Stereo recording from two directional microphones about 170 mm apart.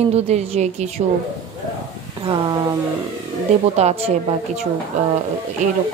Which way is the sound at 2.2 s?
30° right (ahead or behind).